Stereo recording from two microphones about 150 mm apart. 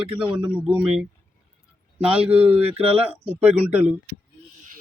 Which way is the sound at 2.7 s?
40° right (ahead or behind).